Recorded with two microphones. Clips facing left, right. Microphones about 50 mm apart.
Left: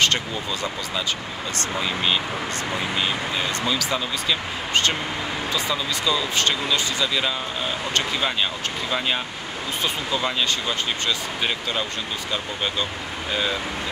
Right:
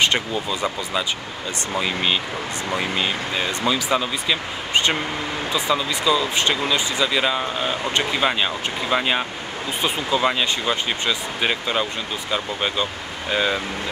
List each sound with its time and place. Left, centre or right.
0.0 s speech: centre
3.0 s speech: centre